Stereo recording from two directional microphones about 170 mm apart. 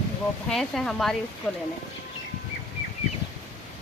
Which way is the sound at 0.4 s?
5° left (ahead or behind).